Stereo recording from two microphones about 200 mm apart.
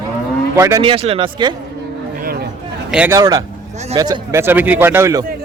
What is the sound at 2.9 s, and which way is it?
Speech, 5° right (ahead or behind).